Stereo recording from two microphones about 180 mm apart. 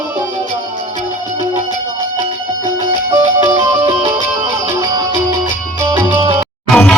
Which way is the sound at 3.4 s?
20° right (ahead or behind).